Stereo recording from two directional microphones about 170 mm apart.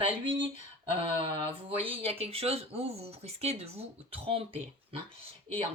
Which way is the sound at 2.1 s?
35° right (ahead or behind).